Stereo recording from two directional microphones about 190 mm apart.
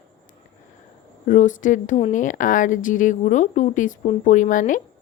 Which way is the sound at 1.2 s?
40° left (ahead or behind).